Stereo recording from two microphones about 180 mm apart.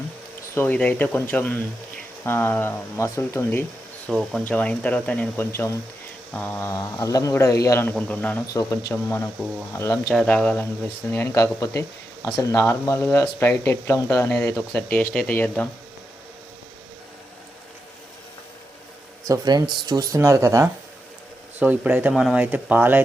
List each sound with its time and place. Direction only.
0.5 s speech: 10° left (ahead or behind)
4.1 s speech: centre (ahead or behind)
19.3 s speech: 20° right (ahead or behind)